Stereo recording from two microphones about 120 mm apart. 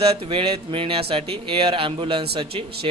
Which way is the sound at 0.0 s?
55° right (ahead or behind).